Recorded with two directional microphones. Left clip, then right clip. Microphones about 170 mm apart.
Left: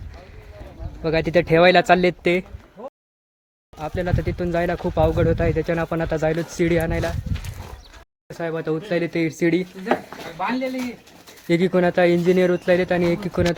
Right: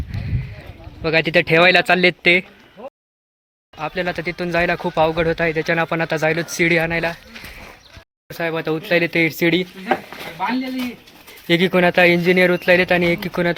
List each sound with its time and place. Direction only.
1.0 s speech: centre (ahead or behind)
2.8 s a sound: 25° right (ahead or behind)
3.8 s speech: centre (ahead or behind)
8.3 s speech: 5° right (ahead or behind)
11.4 s speech: centre (ahead or behind)